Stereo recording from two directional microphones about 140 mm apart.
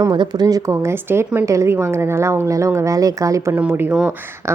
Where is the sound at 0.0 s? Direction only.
30° right (ahead or behind).